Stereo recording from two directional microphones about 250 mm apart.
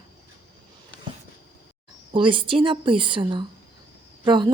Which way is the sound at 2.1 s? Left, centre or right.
Centre.